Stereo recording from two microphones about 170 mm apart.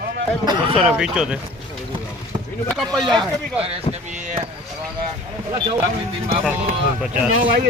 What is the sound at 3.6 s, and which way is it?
Speech, 40° right (ahead or behind).